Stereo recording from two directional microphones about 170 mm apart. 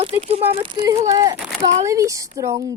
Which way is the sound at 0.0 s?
35° right (ahead or behind).